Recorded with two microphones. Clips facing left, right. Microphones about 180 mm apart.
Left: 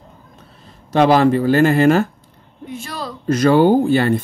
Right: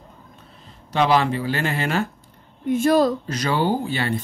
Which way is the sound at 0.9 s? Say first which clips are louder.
Left 7 dB; 45° left (ahead or behind).